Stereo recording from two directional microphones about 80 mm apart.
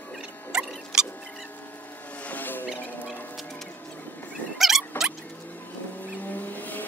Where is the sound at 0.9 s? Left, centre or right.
Centre.